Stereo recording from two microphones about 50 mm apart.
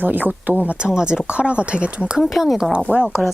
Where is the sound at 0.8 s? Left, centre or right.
Centre.